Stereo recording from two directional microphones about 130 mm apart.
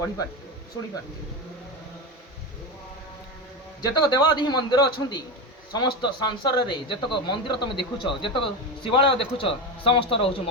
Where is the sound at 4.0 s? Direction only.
35° left (ahead or behind).